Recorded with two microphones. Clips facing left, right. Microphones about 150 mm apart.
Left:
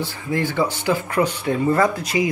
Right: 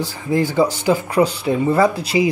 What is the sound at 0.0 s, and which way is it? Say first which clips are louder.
Speech: right 4 dB; 35° right (ahead or behind).